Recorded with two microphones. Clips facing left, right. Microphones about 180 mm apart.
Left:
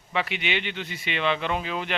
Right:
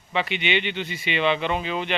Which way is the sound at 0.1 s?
Centre (ahead or behind).